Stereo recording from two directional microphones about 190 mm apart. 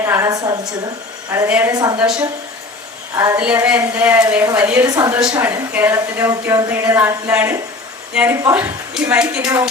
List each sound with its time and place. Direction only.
0.0 s a woman's voice: 15° right (ahead or behind)
1.7 s a woman's voice: 20° right (ahead or behind)
2.0 s a woman's voice: 5° right (ahead or behind)
3.2 s a woman's voice: 15° right (ahead or behind)
3.4 s a woman's voice: 5° right (ahead or behind)